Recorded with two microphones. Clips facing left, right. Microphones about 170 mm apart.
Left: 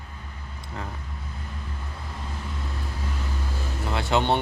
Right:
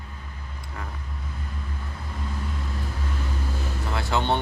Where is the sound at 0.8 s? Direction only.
20° left (ahead or behind).